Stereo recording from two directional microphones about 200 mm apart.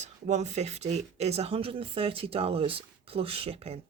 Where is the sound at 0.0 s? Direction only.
35° right (ahead or behind).